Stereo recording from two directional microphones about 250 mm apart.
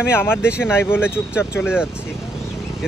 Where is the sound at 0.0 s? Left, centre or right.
Centre.